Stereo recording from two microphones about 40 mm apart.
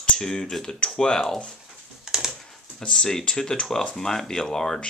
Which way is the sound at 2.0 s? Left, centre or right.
Centre.